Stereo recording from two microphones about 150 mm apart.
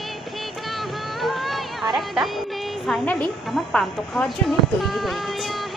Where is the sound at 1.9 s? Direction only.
Centre (ahead or behind).